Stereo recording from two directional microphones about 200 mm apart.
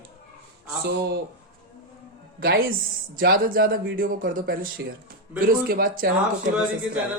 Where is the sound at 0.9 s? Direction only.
50° right (ahead or behind).